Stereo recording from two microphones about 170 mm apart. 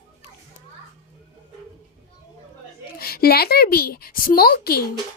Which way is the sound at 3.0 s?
65° left (ahead or behind).